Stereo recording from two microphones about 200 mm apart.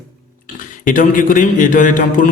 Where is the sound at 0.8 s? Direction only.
40° left (ahead or behind).